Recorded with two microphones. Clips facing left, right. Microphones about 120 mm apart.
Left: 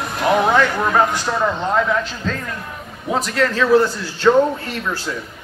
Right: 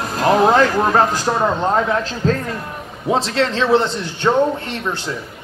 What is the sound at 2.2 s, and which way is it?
A man's voice, 35° right (ahead or behind).